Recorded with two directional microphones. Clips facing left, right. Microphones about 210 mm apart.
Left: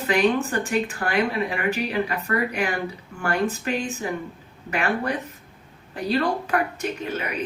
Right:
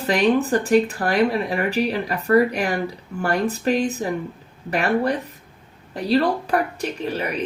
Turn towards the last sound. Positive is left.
turn(degrees=-35)  # may be behind; listen again after turning